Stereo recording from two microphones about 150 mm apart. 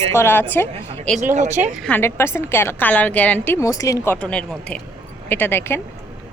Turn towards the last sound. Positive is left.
turn(degrees=15)  # may be behind; listen again after turning